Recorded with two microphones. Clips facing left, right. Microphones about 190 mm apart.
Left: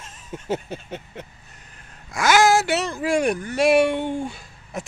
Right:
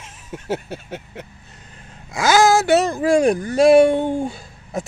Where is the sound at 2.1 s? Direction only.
30° right (ahead or behind).